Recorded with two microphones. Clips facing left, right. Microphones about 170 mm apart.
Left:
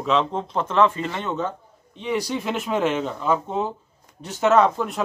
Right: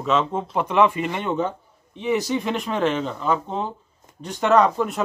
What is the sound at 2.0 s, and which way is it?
Speech, centre (ahead or behind).